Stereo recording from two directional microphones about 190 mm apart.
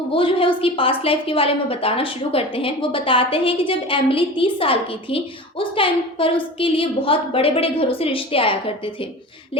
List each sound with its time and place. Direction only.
0.1 s a woman's voice: 30° left (ahead or behind)